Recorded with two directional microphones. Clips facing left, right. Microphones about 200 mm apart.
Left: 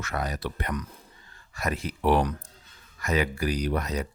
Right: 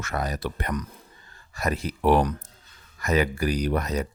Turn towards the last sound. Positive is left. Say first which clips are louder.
# right 3 dB
turn(degrees=-45)  # may be behind; listen again after turning